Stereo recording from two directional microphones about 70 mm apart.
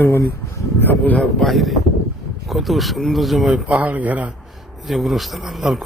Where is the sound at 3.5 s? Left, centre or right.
Right.